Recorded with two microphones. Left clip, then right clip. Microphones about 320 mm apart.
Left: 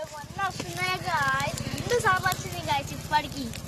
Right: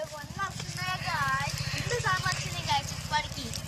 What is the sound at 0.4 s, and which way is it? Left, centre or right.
Vehicle, left.